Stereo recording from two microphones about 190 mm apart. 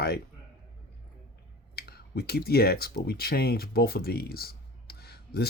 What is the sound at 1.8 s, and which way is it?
Speech, 55° left (ahead or behind).